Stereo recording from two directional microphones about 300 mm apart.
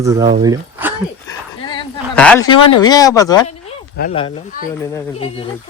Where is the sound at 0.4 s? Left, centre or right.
Centre.